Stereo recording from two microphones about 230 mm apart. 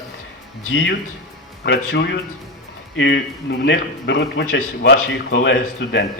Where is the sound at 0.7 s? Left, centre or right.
Left.